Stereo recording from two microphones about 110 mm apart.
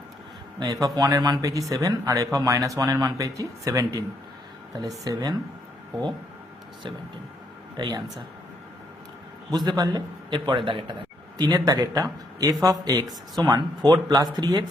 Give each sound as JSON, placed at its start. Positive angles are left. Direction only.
{"t": 0.6, "sound": "speech", "side_deg": -35}
{"t": 7.8, "sound": "speech", "side_deg": -35}
{"t": 9.5, "sound": "a man's voice", "side_deg": -40}
{"t": 11.3, "sound": "speech", "side_deg": -35}